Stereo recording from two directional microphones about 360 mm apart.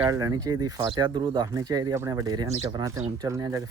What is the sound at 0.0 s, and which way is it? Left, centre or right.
Speech, centre.